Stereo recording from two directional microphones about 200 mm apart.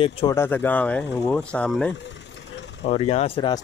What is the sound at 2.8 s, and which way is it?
Speech, 30° left (ahead or behind).